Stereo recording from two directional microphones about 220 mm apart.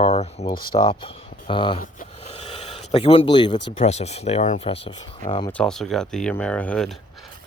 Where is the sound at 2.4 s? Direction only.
25° left (ahead or behind).